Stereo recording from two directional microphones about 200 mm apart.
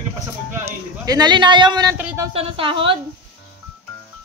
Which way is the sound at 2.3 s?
25° right (ahead or behind).